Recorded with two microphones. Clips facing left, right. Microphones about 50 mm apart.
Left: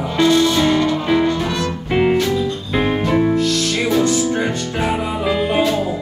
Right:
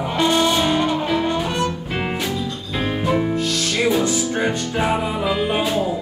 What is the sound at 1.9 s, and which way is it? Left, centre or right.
Music, centre.